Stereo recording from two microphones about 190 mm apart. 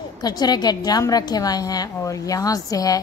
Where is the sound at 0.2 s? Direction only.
20° left (ahead or behind).